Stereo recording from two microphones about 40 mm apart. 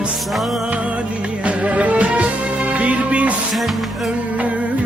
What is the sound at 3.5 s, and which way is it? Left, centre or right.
Music, centre.